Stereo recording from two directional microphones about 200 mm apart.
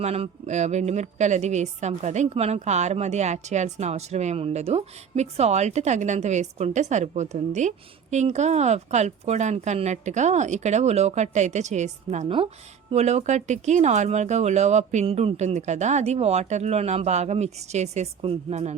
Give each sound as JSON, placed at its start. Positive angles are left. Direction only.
{"t": 0.0, "sound": "a woman's voice", "side_deg": -30}